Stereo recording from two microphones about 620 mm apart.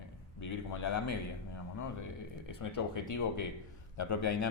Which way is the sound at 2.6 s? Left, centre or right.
Left.